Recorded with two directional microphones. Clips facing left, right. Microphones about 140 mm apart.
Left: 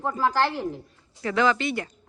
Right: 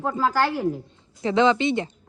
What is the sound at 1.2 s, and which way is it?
Speech, 20° right (ahead or behind).